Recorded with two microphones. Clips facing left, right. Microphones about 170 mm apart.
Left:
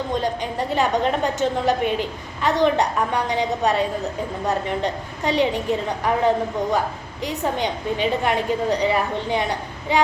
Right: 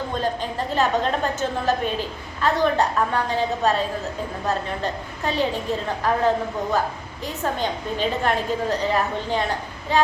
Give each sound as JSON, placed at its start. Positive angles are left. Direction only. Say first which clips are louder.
{"t": 0.7, "sound": "a woman's voice", "louder": "left 1 dB", "side_deg": 15}